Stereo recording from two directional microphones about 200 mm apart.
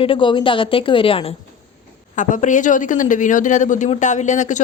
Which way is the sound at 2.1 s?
40° left (ahead or behind).